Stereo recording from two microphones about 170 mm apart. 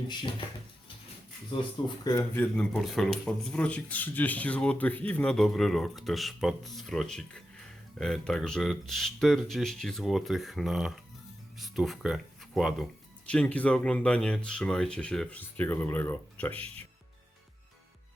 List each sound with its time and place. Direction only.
0.1 s speech: 25° left (ahead or behind)
1.5 s speech: 30° left (ahead or behind)
2.3 s speech: 5° left (ahead or behind)